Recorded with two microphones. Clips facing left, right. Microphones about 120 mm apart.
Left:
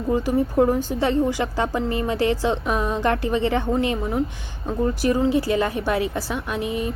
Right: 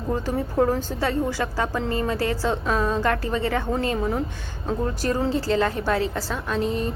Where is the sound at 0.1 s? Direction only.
10° left (ahead or behind).